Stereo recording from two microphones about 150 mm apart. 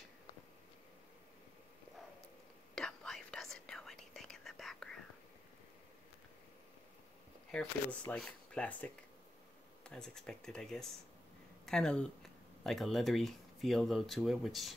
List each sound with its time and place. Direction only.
2.7 s whispering: 5° left (ahead or behind)
7.5 s speech: 5° left (ahead or behind)